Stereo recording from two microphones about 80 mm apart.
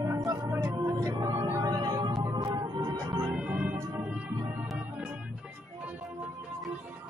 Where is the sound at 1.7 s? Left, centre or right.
Right.